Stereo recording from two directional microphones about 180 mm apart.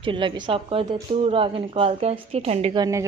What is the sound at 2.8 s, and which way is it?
Speech, 15° right (ahead or behind).